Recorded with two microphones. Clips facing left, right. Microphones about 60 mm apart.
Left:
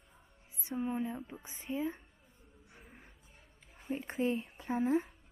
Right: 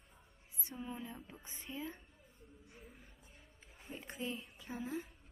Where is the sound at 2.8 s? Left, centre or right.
Left.